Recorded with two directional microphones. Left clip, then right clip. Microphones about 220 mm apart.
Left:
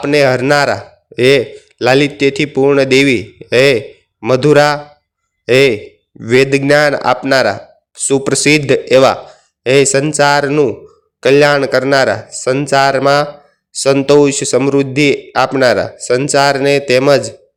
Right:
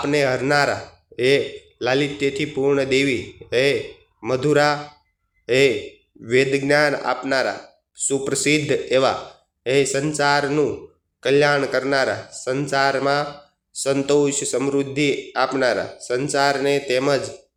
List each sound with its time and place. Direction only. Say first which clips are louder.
0.0 s speech: left 9 dB; 40° left (ahead or behind)